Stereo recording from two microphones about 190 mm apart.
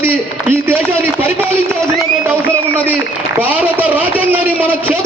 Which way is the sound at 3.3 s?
10° right (ahead or behind).